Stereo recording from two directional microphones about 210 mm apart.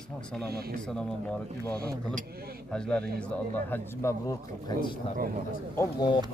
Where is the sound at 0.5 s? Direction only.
45° right (ahead or behind).